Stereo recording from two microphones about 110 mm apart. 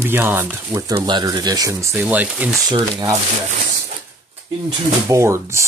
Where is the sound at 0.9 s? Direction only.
45° right (ahead or behind).